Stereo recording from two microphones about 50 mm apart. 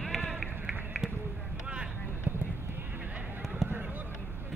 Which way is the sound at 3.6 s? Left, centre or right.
Centre.